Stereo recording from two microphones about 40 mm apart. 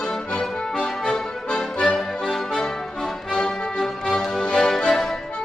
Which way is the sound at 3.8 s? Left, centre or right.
Centre.